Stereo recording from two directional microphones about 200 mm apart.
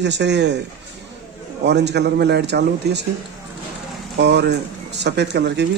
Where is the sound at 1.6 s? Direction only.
60° right (ahead or behind).